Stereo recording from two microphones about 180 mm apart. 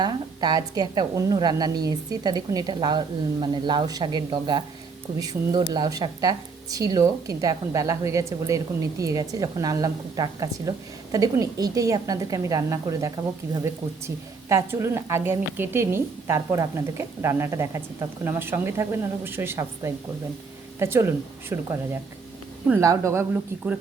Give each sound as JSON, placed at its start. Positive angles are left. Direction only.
{"t": 0.0, "sound": "speech", "side_deg": -25}
{"t": 14.5, "sound": "a woman's voice", "side_deg": -15}